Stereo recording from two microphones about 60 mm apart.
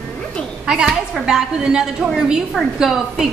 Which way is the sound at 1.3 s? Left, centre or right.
Centre.